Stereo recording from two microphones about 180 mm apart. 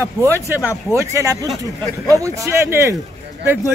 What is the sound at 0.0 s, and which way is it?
Speech, 15° right (ahead or behind).